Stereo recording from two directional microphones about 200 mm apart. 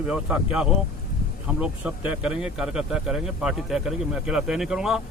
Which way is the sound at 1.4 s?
5° right (ahead or behind).